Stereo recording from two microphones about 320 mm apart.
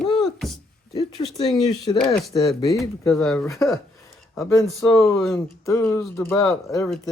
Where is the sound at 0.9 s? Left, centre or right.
Centre.